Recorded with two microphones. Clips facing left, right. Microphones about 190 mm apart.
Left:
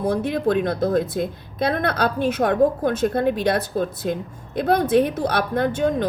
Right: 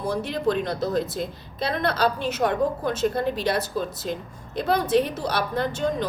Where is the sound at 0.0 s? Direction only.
55° left (ahead or behind).